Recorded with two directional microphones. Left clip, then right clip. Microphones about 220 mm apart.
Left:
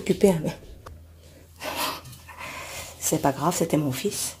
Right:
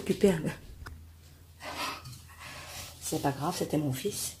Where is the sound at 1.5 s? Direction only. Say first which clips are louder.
Left 7 dB; 40° left (ahead or behind).